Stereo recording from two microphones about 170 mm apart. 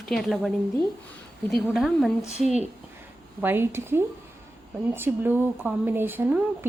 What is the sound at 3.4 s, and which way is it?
Speech, 15° right (ahead or behind).